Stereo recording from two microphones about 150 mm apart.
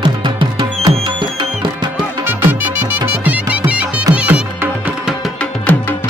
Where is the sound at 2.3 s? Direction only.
15° right (ahead or behind).